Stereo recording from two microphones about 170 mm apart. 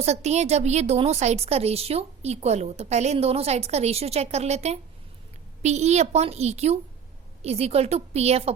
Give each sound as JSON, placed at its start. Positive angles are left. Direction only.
{"t": 0.0, "sound": "a woman's voice", "side_deg": -40}